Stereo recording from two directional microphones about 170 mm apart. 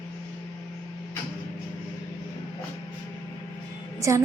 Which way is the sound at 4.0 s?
15° right (ahead or behind).